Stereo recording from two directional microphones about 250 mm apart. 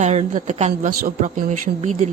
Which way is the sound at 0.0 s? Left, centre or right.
Right.